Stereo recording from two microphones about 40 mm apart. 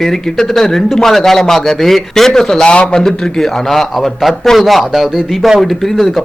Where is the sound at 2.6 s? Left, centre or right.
Left.